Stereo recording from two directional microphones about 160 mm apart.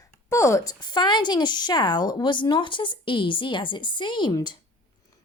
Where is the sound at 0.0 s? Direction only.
20° left (ahead or behind).